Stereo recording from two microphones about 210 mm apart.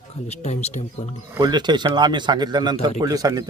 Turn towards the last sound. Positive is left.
turn(degrees=-15)  # may be behind; listen again after turning